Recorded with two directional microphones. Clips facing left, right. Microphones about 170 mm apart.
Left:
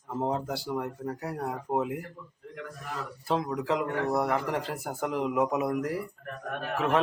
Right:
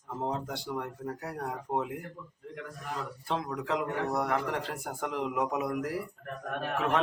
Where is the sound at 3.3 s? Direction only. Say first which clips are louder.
Left 4 dB; 5° left (ahead or behind).